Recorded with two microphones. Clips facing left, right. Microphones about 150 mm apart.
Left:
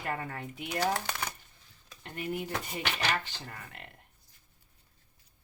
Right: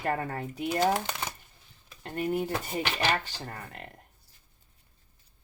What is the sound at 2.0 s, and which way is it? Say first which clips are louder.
Speech: right 6 dB; 40° right (ahead or behind).